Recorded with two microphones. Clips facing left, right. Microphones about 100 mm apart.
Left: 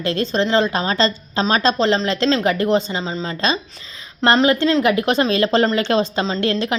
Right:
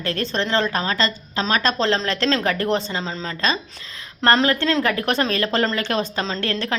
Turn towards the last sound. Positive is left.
turn(degrees=15)  # may be behind; listen again after turning